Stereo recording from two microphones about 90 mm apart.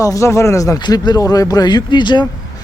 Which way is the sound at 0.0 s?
35° left (ahead or behind).